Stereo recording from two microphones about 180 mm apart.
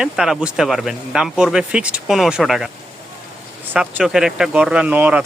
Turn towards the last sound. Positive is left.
turn(degrees=-10)  # may be behind; listen again after turning